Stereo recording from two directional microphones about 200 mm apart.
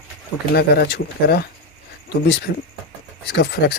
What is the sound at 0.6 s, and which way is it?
Speech, 55° left (ahead or behind).